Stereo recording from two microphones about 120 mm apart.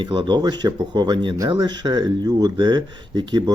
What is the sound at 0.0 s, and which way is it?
Speech, 40° right (ahead or behind).